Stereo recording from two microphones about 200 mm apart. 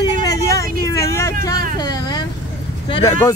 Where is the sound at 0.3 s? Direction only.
15° left (ahead or behind).